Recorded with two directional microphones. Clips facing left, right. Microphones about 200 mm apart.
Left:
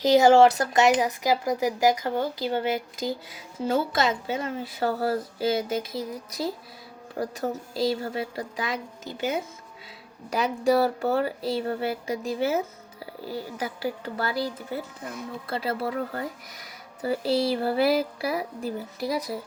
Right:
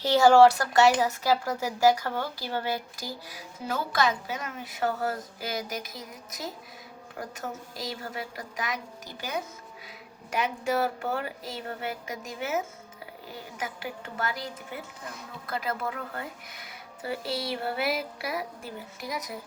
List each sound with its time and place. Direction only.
0.0 s speech: 15° left (ahead or behind)
10.2 s speech: 35° left (ahead or behind)